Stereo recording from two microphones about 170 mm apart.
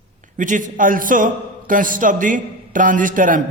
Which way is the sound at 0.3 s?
50° right (ahead or behind).